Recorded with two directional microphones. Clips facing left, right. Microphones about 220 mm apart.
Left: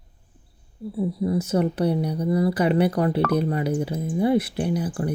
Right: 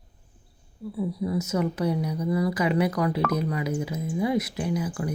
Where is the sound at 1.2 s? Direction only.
30° left (ahead or behind).